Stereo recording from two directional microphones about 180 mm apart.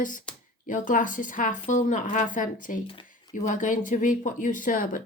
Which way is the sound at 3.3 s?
45° left (ahead or behind).